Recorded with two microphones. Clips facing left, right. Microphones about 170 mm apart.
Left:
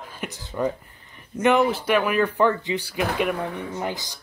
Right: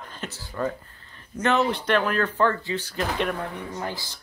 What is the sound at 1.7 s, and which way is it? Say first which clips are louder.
Speech: left 2 dB; 10° left (ahead or behind).